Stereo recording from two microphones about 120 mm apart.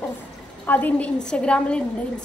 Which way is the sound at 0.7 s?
15° left (ahead or behind).